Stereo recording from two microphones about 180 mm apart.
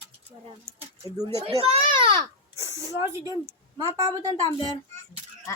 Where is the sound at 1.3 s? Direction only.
35° right (ahead or behind).